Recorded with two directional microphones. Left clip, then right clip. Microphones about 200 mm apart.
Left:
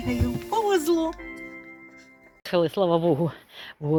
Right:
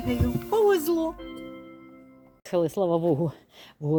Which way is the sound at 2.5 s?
5° right (ahead or behind).